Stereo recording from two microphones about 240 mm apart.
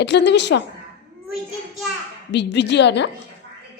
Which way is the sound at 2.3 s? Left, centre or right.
Left.